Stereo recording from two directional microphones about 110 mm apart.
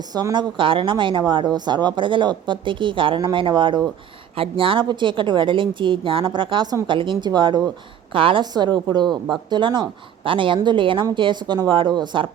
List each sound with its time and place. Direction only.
0.0 s a woman's voice: 35° right (ahead or behind)
8.1 s a woman's voice: 50° right (ahead or behind)